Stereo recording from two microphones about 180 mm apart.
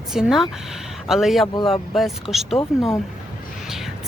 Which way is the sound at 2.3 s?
Centre (ahead or behind).